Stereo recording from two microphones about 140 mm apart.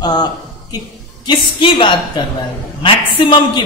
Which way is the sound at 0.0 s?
30° left (ahead or behind).